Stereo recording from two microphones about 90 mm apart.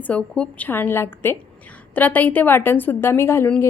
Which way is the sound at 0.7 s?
25° left (ahead or behind).